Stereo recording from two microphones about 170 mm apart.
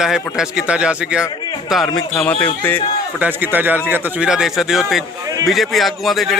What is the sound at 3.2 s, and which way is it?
A man's voice, 10° right (ahead or behind).